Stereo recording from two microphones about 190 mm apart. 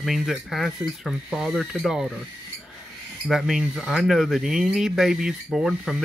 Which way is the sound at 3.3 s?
Centre (ahead or behind).